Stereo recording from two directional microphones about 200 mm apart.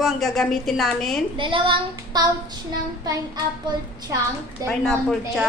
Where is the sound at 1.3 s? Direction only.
25° right (ahead or behind).